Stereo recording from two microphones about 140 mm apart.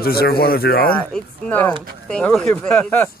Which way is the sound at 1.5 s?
10° left (ahead or behind).